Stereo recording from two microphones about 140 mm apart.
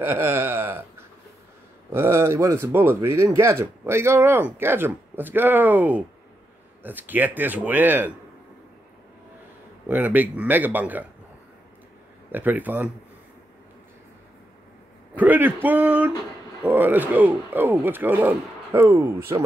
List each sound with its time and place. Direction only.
0.0 s a sound: 15° right (ahead or behind)
1.9 s speech: 20° right (ahead or behind)
9.8 s speech: 10° right (ahead or behind)
12.3 s speech: 15° right (ahead or behind)
15.1 s speech: 15° right (ahead or behind)